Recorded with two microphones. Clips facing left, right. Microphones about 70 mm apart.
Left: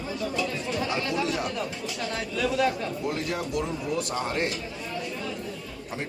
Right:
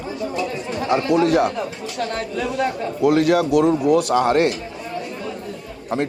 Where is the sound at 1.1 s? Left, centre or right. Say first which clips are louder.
Right 11 dB; right.